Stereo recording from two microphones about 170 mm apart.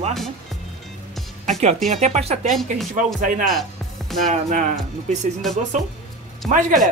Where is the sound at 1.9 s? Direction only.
40° right (ahead or behind).